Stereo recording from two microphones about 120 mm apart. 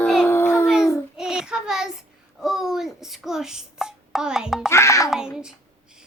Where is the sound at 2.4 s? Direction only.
5° right (ahead or behind).